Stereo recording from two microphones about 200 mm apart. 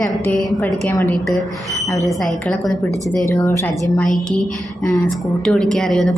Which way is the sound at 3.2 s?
15° left (ahead or behind).